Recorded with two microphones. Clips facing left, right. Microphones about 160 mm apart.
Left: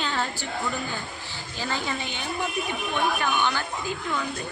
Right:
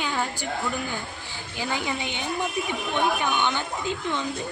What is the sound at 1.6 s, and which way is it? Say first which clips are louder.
A man's voice: right 1 dB; 15° right (ahead or behind).